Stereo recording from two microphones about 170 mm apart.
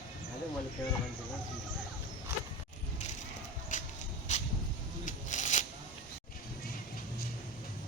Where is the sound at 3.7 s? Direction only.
50° left (ahead or behind).